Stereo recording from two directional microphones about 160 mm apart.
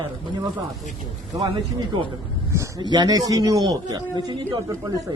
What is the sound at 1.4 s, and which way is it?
Speech, 30° right (ahead or behind).